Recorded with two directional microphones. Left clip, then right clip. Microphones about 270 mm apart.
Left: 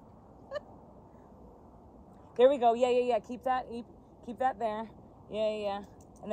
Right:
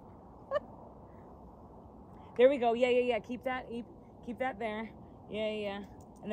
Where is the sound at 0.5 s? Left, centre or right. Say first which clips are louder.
Right 5 dB; centre.